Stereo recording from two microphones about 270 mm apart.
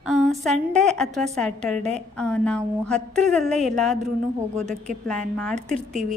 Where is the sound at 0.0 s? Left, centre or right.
Centre.